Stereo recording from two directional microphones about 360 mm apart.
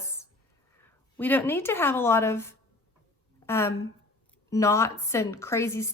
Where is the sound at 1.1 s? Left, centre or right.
Centre.